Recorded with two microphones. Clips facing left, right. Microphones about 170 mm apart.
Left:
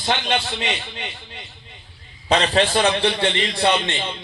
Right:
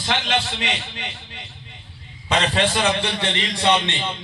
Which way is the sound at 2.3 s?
35° left (ahead or behind).